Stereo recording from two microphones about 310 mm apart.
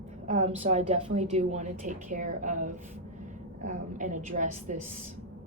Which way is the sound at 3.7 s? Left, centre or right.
Right.